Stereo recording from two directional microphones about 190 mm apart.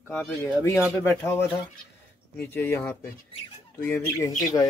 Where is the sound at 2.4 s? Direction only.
10° left (ahead or behind).